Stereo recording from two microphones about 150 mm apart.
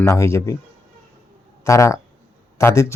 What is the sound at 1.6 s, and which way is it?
A man's voice, 20° left (ahead or behind).